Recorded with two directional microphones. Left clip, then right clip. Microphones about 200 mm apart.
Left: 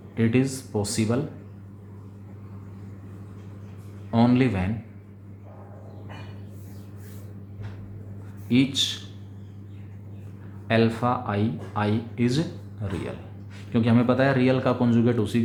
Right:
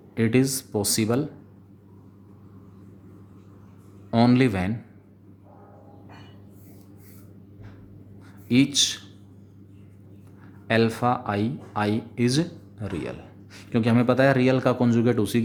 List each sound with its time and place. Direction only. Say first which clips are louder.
0.2 s speech: right 2 dB; 45° right (ahead or behind)
4.1 s speech: right 2 dB; 45° right (ahead or behind)
8.4 s speech: right 2 dB; 40° right (ahead or behind)
10.7 s speech: right 1 dB; 45° right (ahead or behind)